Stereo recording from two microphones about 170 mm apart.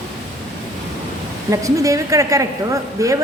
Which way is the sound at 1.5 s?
20° right (ahead or behind).